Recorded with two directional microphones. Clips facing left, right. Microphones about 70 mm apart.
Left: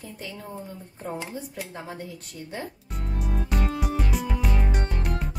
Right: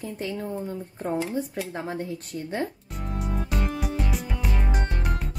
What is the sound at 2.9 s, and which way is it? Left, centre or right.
Music, centre.